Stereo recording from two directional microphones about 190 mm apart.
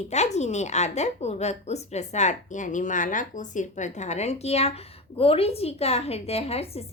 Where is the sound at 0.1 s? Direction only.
35° left (ahead or behind).